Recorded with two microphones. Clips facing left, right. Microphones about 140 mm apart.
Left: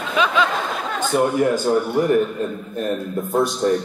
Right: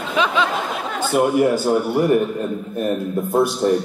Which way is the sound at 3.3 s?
10° right (ahead or behind).